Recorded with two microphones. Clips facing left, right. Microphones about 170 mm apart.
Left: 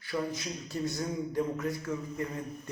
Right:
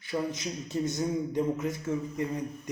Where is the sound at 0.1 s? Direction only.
20° right (ahead or behind).